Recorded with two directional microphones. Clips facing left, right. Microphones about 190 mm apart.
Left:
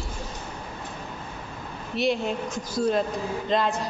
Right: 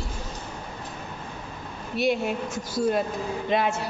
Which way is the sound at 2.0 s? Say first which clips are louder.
Right 1 dB; 5° right (ahead or behind).